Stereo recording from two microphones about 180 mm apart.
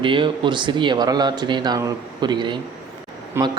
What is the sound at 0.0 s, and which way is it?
A man's voice, 25° right (ahead or behind).